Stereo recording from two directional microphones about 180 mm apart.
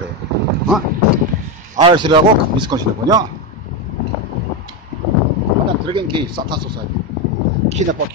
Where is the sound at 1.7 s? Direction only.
25° right (ahead or behind).